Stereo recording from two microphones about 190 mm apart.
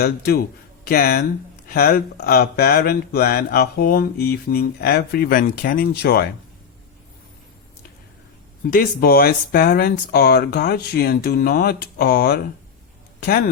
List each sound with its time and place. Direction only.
0.0 s speech: 55° left (ahead or behind)
8.7 s speech: 50° left (ahead or behind)